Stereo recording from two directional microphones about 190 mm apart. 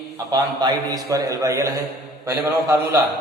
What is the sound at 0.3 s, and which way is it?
A man's voice, 20° right (ahead or behind).